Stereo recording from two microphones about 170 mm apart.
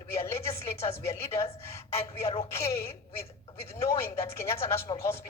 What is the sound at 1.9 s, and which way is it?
Speech, 35° left (ahead or behind).